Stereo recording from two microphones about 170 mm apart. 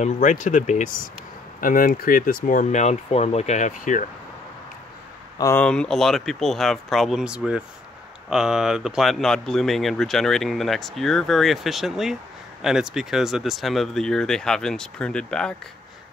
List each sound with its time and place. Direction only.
0.0 s speech: 45° left (ahead or behind)
5.4 s speech: 15° left (ahead or behind)
5.7 s speech: 5° left (ahead or behind)